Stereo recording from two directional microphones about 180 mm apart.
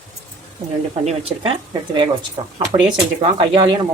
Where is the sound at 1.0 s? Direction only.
30° right (ahead or behind).